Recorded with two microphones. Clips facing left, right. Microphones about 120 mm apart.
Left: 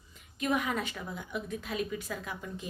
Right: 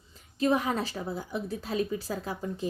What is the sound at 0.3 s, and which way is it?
A woman's voice, 30° right (ahead or behind).